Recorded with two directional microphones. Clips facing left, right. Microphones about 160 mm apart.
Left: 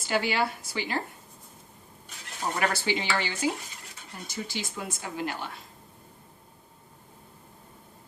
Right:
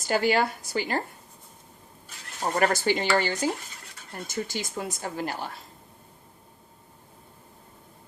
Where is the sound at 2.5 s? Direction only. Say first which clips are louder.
Right 5 dB; 45° right (ahead or behind).